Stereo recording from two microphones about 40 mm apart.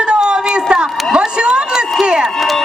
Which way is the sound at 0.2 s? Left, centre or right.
Centre.